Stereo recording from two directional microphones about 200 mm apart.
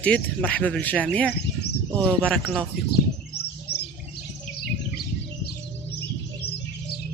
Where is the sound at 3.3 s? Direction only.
55° left (ahead or behind).